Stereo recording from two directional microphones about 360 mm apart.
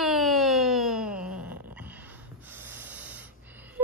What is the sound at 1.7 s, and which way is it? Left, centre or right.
Snort, centre.